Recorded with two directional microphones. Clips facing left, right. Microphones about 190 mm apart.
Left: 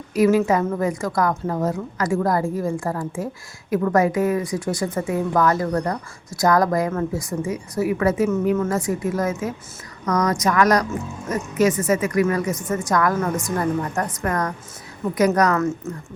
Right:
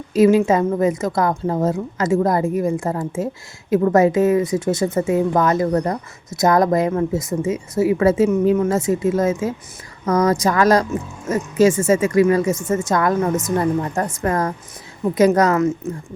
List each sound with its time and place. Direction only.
0.1 s a woman's voice: 25° right (ahead or behind)